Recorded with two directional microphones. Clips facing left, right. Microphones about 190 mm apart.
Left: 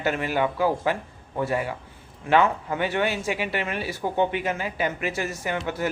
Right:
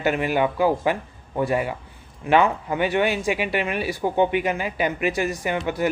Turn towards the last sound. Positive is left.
turn(degrees=-15)  # may be behind; listen again after turning